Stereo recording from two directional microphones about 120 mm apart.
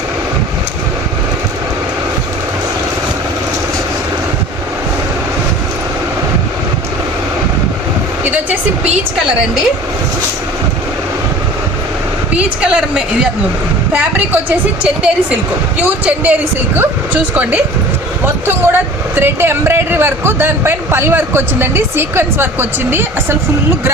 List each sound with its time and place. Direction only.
8.2 s vehicle: 15° right (ahead or behind)
12.6 s a woman's voice: 10° right (ahead or behind)
14.8 s a woman's voice: 10° right (ahead or behind)